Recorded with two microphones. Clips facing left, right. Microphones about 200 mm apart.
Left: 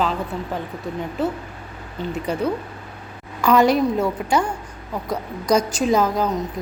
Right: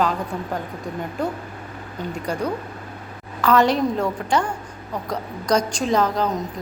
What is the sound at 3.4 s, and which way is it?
A woman's voice, 10° left (ahead or behind).